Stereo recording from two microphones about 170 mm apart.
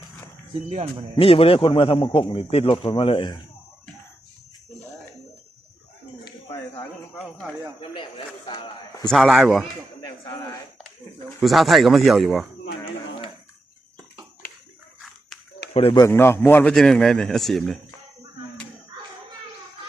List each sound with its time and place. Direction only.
0.7 s speech: 40° right (ahead or behind)
1.1 s a man's voice: 35° left (ahead or behind)
6.2 s a sound: 25° left (ahead or behind)
7.1 s a man's voice: 10° left (ahead or behind)
7.8 s a man's voice: 30° left (ahead or behind)
9.0 s speech: centre (ahead or behind)
11.3 s speech: centre (ahead or behind)
15.7 s speech: 35° left (ahead or behind)
16.0 s a man's voice: 15° left (ahead or behind)